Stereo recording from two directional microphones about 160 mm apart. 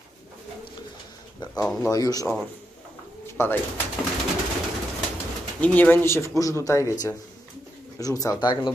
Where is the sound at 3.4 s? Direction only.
15° left (ahead or behind).